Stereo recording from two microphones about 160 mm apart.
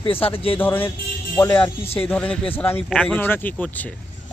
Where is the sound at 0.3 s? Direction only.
35° left (ahead or behind).